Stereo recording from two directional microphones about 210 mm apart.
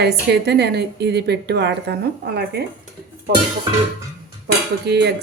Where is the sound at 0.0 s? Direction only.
50° right (ahead or behind).